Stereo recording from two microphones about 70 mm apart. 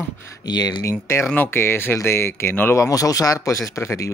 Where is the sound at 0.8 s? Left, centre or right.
Left.